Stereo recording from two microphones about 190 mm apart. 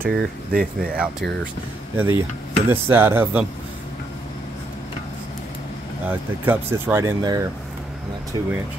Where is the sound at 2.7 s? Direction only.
10° right (ahead or behind).